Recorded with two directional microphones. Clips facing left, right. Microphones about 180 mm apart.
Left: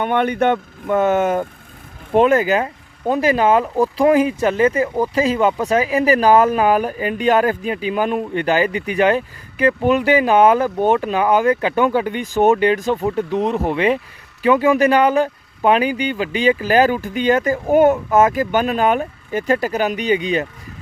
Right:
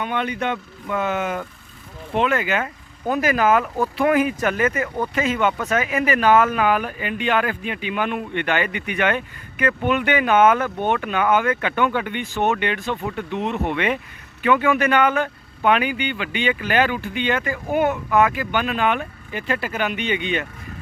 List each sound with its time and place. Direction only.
0.0 s speech: 55° left (ahead or behind); by 20.5 s 35° left (ahead or behind)